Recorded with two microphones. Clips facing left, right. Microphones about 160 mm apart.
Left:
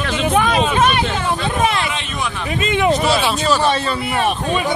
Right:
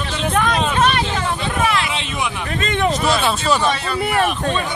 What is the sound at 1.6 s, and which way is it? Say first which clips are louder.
Speech: even; 25° left (ahead or behind).